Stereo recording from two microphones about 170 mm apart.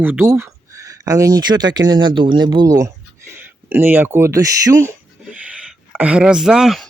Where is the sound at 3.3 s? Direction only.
10° right (ahead or behind).